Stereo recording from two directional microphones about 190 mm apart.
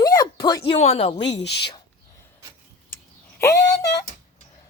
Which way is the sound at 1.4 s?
60° left (ahead or behind).